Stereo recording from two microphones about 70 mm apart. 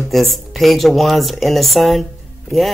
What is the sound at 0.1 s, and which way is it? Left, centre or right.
Speech, centre.